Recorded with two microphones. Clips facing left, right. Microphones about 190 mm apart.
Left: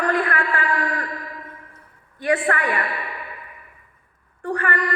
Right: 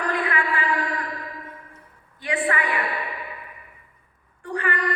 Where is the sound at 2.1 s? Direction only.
50° left (ahead or behind).